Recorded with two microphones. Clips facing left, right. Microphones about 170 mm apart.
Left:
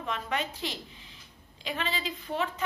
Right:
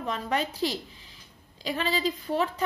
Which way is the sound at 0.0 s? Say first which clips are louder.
Right 4 dB; 35° right (ahead or behind).